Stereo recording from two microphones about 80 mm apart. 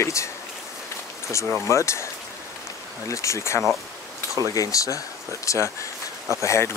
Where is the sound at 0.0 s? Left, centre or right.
Left.